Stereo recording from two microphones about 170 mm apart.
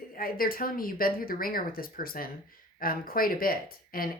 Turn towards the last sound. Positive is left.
turn(degrees=60)  # may be behind; listen again after turning